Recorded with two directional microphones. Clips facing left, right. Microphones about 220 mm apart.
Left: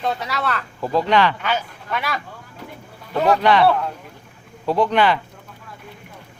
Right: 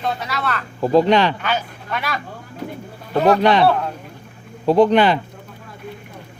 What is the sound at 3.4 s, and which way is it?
Speech, 20° right (ahead or behind).